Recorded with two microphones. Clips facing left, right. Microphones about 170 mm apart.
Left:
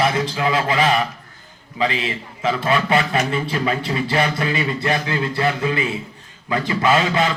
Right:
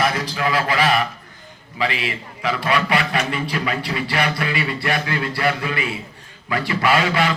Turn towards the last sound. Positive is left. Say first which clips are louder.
# left 1 dB
turn(degrees=20)  # may be behind; listen again after turning